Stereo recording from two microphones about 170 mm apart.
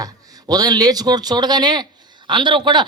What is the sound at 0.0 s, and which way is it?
A woman's voice, 20° right (ahead or behind).